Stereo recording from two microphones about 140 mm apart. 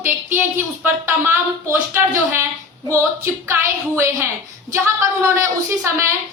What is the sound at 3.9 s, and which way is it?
A woman's voice, 20° right (ahead or behind).